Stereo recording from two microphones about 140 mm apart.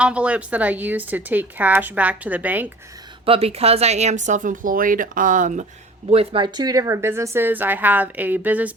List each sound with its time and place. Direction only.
0.0 s speech: 10° right (ahead or behind)
3.2 s speech: 45° right (ahead or behind); by 5.6 s 65° right (ahead or behind)
6.1 s speech: 40° right (ahead or behind); by 8.7 s 10° right (ahead or behind)